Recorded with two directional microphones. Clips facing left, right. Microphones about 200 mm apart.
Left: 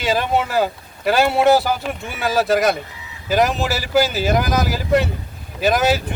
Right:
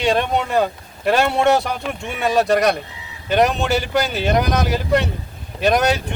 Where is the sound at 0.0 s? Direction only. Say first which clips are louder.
Right 1 dB; 5° left (ahead or behind).